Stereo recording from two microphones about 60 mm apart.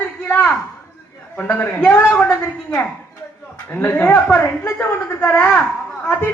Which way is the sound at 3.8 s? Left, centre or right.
Left.